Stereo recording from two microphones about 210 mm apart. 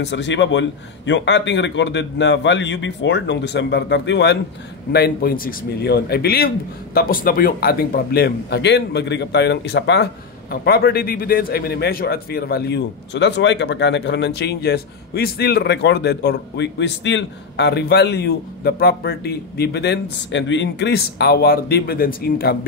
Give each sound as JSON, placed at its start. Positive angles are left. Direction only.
{"t": 0.0, "sound": "a man's voice", "side_deg": 55}